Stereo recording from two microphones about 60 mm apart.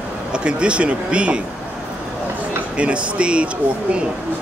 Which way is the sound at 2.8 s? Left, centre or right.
Centre.